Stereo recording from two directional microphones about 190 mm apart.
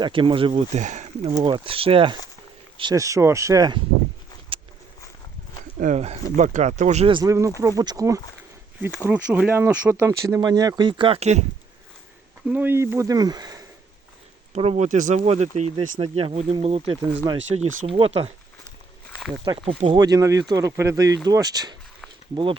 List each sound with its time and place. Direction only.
0.0 s speech: 25° right (ahead or behind)
0.8 s speech: 40° right (ahead or behind)
1.4 s speech: 25° right (ahead or behind)
5.8 s speech: 35° right (ahead or behind)
12.5 s speech: 10° right (ahead or behind)
14.5 s speech: 35° right (ahead or behind)
17.2 s speech: 20° right (ahead or behind)
17.8 s speech: 30° right (ahead or behind)
19.5 s speech: 30° right (ahead or behind)